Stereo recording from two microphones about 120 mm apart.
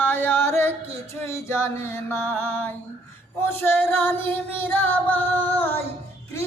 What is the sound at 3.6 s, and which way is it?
Female singing, 15° left (ahead or behind).